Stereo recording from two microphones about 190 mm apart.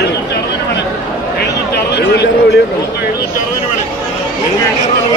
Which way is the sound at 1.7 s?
60° left (ahead or behind).